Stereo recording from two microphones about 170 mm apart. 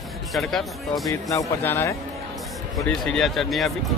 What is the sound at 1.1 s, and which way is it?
Speech, 20° left (ahead or behind).